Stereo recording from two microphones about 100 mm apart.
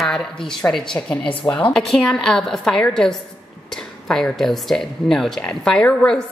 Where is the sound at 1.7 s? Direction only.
5° left (ahead or behind).